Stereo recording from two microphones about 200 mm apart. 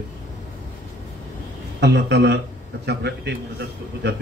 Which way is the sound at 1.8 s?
60° right (ahead or behind).